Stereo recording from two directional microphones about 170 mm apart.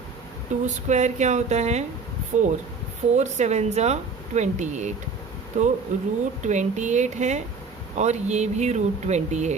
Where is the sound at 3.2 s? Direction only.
45° right (ahead or behind).